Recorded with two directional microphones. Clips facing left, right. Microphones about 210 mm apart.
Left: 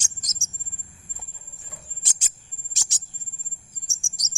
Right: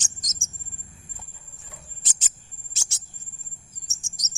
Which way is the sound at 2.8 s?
15° left (ahead or behind).